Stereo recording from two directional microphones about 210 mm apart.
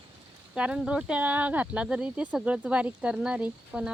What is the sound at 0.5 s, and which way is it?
Speech, 5° right (ahead or behind).